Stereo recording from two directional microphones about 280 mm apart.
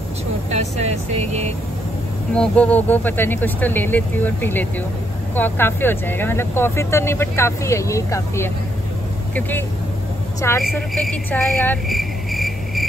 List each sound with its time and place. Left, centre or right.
0.5 s speech: right
2.3 s speech: centre